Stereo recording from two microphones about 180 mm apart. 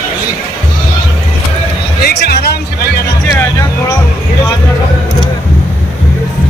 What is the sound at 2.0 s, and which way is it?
Music, 60° left (ahead or behind).